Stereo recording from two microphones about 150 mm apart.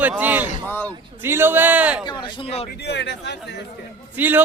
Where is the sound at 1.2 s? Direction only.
15° right (ahead or behind).